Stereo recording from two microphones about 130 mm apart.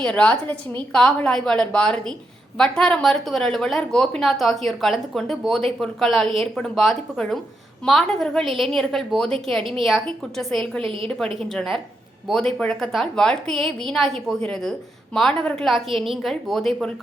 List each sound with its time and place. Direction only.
0.0 s a woman's voice: 10° left (ahead or behind)
10.8 s a woman's voice: 45° right (ahead or behind)
11.3 s speech: centre (ahead or behind)